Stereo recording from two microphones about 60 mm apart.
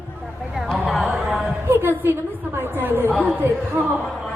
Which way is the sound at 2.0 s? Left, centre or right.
Right.